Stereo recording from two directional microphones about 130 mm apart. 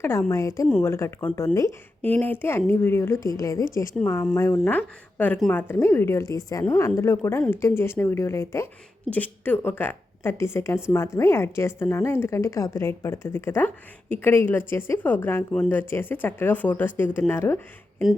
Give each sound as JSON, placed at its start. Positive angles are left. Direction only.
{"t": 0.0, "sound": "a woman's voice", "side_deg": 20}
{"t": 4.6, "sound": "a woman's voice", "side_deg": 15}